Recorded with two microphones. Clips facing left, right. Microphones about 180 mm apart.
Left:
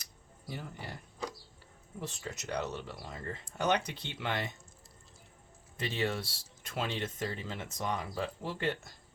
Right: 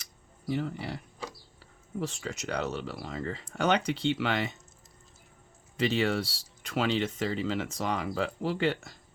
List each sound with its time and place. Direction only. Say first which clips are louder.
0.4 s speech: right 11 dB; 85° right
5.7 s speech: right 7 dB; 90° right